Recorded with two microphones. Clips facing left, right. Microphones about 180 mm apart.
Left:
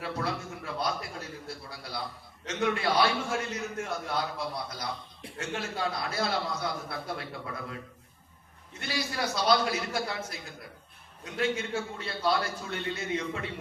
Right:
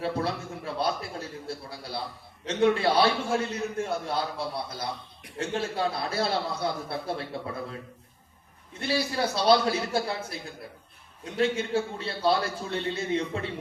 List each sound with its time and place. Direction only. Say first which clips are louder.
0.0 s a man's voice: right 4 dB; 30° right (ahead or behind)
8.8 s a man's voice: right 5 dB; 30° right (ahead or behind)